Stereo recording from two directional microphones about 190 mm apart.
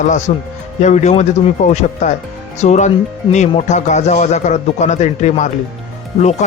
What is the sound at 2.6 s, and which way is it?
Speech, 35° left (ahead or behind).